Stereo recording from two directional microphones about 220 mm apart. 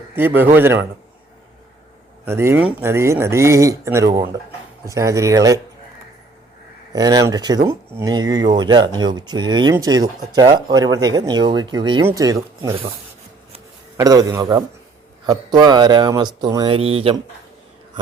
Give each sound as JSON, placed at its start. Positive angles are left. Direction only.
{"t": 0.2, "sound": "speech", "side_deg": -10}
{"t": 2.2, "sound": "speech", "side_deg": -10}
{"t": 6.9, "sound": "speech", "side_deg": -15}
{"t": 13.9, "sound": "speech", "side_deg": -15}